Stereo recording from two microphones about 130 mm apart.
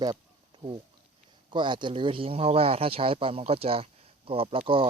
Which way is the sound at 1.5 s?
35° right (ahead or behind).